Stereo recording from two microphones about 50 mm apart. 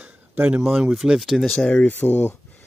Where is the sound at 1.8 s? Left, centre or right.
Left.